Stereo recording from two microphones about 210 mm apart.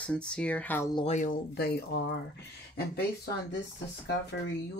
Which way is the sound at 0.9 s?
30° left (ahead or behind).